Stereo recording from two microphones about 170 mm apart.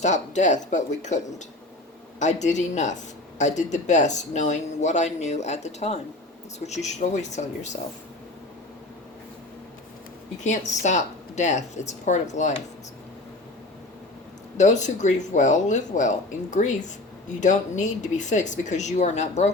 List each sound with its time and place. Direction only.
0.0 s speech: 45° left (ahead or behind)
10.4 s speech: 45° left (ahead or behind)
14.6 s speech: 45° left (ahead or behind)